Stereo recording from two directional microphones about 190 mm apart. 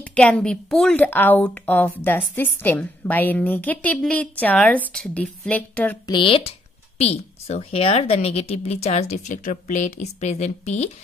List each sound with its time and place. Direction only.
0.0 s a woman's voice: 5° left (ahead or behind)
6.0 s a woman's voice: 25° left (ahead or behind)